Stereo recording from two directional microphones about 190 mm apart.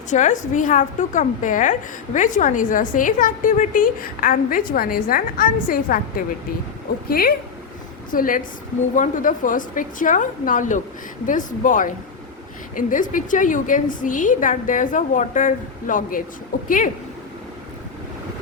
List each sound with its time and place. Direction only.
0.1 s a woman's voice: 40° left (ahead or behind)